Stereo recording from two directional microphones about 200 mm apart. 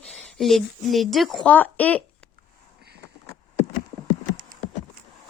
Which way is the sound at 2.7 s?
55° right (ahead or behind).